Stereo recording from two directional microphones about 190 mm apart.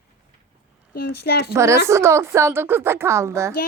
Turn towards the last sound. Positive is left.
turn(degrees=-15)  # may be behind; listen again after turning